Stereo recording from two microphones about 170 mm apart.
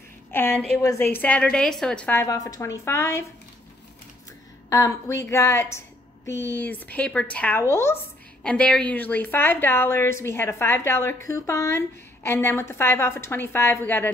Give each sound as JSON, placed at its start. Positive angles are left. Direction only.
{"t": 0.3, "sound": "a woman's voice", "side_deg": 10}
{"t": 2.2, "sound": "a woman's voice", "side_deg": 20}
{"t": 4.6, "sound": "a woman's voice", "side_deg": 20}